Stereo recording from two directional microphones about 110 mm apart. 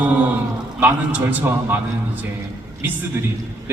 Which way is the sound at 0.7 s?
15° right (ahead or behind).